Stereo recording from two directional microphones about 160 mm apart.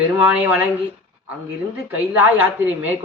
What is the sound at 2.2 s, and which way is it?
Speech, 10° right (ahead or behind).